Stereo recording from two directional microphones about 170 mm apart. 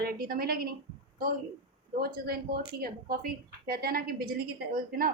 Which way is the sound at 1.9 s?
65° right (ahead or behind).